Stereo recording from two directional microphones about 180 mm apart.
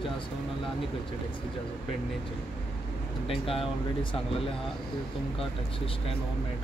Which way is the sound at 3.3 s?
30° left (ahead or behind).